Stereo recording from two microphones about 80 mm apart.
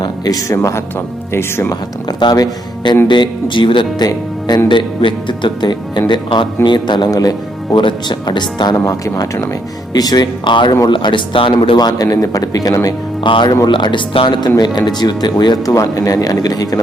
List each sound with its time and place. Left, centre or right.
0.4 s speech: left
2.3 s speech: left
3.1 s speech: left
4.0 s speech: left
4.7 s speech: left
7.1 s speech: left
7.8 s speech: left
8.8 s speech: left
12.0 s speech: left
13.2 s speech: left
14.6 s speech: left
15.6 s speech: left